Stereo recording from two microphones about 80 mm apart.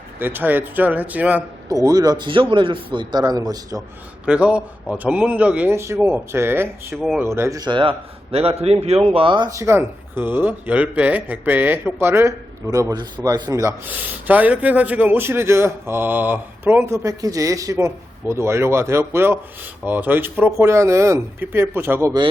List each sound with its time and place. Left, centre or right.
0.2 s a man's voice: right
1.7 s speech: right
4.3 s a man's voice: centre
5.7 s a man's voice: right
7.6 s a man's voice: right
9.2 s speech: right
9.5 s a man's voice: right
13.2 s speech: right
13.8 s a man's voice: right
17.7 s a man's voice: right
20.7 s a man's voice: right